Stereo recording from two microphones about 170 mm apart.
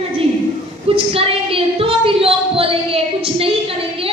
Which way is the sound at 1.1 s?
35° right (ahead or behind).